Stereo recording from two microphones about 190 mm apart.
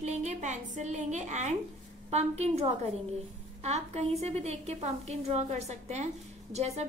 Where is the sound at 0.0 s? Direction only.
35° right (ahead or behind).